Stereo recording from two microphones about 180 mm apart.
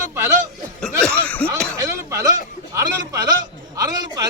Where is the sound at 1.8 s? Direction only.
15° right (ahead or behind).